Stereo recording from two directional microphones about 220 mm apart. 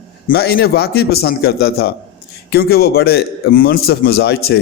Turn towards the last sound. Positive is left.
turn(degrees=45)  # may be behind; listen again after turning